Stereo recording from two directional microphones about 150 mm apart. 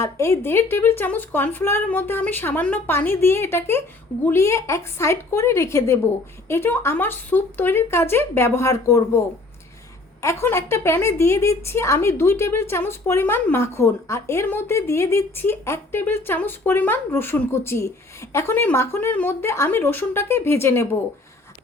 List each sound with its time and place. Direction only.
0.0 s a woman's voice: 20° left (ahead or behind)